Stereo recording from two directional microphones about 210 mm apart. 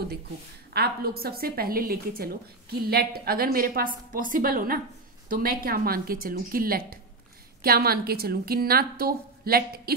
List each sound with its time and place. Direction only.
0.7 s a woman's voice: 45° right (ahead or behind)